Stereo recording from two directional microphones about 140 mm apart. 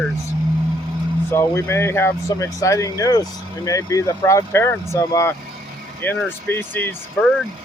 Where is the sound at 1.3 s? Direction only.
20° left (ahead or behind).